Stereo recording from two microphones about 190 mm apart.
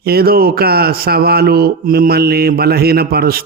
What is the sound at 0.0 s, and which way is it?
A man's voice, 55° right (ahead or behind).